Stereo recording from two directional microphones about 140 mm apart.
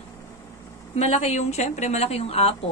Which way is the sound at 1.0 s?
50° left (ahead or behind).